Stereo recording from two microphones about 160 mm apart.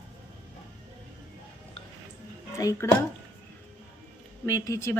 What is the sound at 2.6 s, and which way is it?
Speech, 20° left (ahead or behind).